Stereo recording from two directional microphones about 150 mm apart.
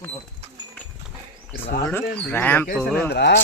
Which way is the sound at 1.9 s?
15° left (ahead or behind).